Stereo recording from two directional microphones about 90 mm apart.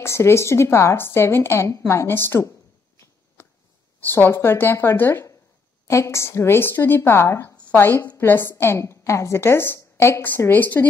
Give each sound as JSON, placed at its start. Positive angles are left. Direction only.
{"t": 0.0, "sound": "a woman's voice", "side_deg": 30}
{"t": 4.0, "sound": "a woman's voice", "side_deg": 25}